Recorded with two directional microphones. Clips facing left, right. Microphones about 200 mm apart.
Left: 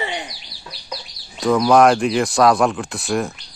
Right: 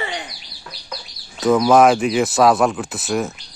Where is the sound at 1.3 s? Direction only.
5° right (ahead or behind).